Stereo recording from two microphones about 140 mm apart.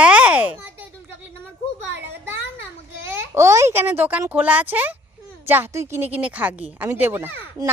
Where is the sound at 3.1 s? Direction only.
20° right (ahead or behind).